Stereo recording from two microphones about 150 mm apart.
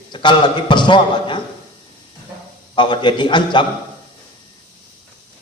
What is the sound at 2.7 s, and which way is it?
Speech, 30° left (ahead or behind).